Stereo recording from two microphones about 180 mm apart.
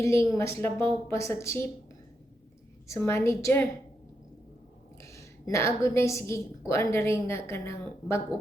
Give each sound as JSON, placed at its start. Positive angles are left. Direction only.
{"t": 0.0, "sound": "a woman's voice", "side_deg": 15}
{"t": 2.8, "sound": "a woman's voice", "side_deg": 15}
{"t": 5.0, "sound": "a woman's voice", "side_deg": 15}